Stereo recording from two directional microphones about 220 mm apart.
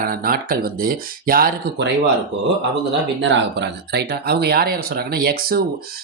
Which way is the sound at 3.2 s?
55° right (ahead or behind).